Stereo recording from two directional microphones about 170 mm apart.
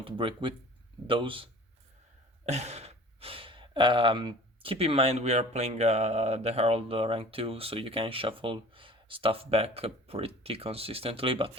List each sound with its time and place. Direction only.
0.0 s speech: 30° right (ahead or behind)
2.5 s speech: 40° right (ahead or behind)